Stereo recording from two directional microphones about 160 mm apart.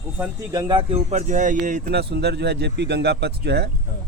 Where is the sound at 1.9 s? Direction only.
90° right.